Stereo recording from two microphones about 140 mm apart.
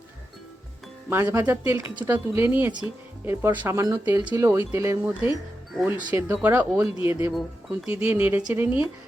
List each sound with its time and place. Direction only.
1.1 s speech: 20° right (ahead or behind)
7.3 s speech: centre (ahead or behind)
7.9 s speech: 15° right (ahead or behind)